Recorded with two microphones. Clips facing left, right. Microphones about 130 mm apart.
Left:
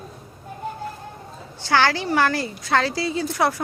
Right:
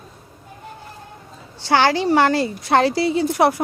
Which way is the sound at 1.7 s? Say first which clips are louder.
Right 4 dB; 20° right (ahead or behind).